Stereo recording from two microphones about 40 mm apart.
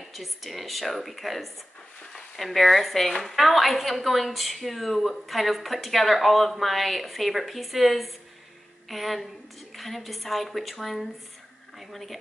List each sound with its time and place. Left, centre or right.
0.0 s a woman's voice: centre